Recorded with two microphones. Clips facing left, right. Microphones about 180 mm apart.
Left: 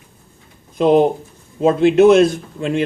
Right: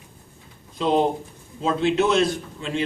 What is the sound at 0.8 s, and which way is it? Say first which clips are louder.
A man's voice: left 8 dB; 55° left (ahead or behind).